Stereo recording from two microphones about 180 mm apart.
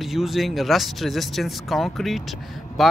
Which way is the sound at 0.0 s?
Centre (ahead or behind).